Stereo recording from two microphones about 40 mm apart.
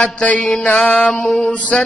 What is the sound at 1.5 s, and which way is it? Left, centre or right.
Mantra, left.